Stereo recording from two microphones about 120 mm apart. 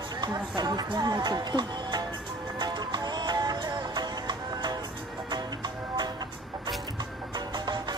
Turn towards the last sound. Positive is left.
turn(degrees=-35)  # may be behind; listen again after turning